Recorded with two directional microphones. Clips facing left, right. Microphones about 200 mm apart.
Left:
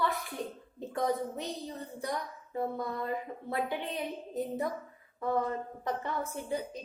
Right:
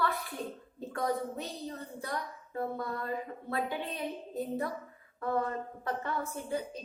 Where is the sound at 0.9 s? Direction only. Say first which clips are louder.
Left 1 dB; 20° left (ahead or behind).